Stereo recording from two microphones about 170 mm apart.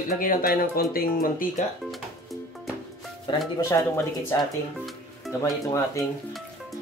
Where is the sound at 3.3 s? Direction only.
20° left (ahead or behind).